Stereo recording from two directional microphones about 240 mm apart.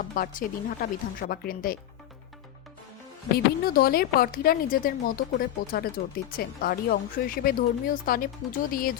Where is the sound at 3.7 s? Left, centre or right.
Left.